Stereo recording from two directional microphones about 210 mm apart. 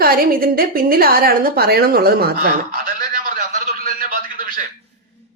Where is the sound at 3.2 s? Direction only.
35° right (ahead or behind).